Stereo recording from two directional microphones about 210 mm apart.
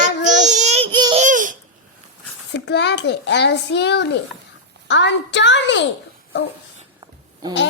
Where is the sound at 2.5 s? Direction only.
55° left (ahead or behind).